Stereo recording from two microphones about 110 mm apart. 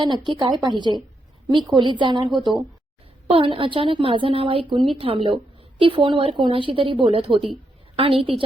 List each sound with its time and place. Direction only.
0.0 s a woman's voice: 45° right (ahead or behind)
7.1 s a woman's voice: 60° right (ahead or behind)